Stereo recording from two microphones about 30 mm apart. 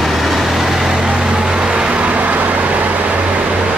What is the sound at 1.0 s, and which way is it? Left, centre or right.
Vehicle, right.